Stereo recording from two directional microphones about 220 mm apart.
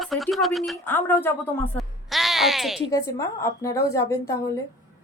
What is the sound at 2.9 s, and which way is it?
A woman's voice, 15° left (ahead or behind).